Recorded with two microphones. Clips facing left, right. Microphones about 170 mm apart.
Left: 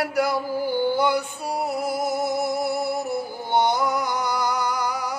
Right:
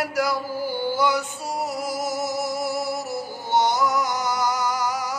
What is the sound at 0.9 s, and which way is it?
Music, 60° left (ahead or behind).